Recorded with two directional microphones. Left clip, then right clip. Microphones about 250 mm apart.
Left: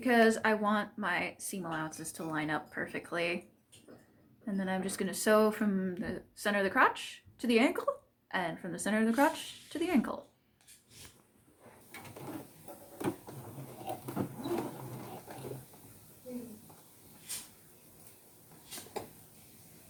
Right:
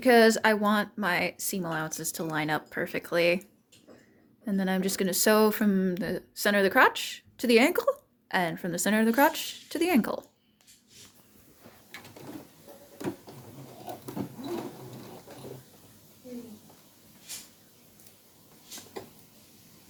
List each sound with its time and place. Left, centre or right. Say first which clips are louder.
0.0 s a woman's voice: right 7 dB; right
4.4 s a woman's voice: right 6 dB; right